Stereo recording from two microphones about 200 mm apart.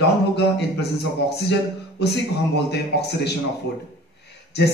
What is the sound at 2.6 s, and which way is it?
Speech, 55° left (ahead or behind).